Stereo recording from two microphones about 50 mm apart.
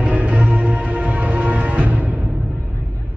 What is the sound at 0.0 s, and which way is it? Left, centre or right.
Music, right.